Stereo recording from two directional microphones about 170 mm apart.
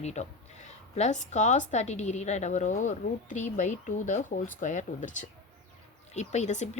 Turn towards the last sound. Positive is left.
turn(degrees=45)  # may be behind; listen again after turning